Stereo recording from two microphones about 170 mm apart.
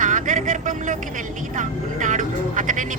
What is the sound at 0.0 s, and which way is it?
Vehicle, 50° right (ahead or behind).